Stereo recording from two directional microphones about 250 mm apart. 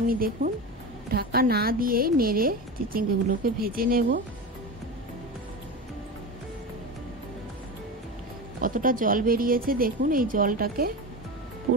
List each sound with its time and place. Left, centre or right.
0.0 s a woman's voice: right
8.5 s a woman's voice: right